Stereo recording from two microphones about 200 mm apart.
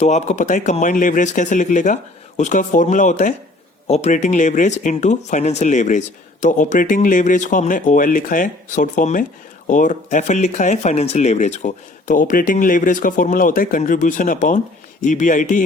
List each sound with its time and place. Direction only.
0.0 s speech: 35° left (ahead or behind)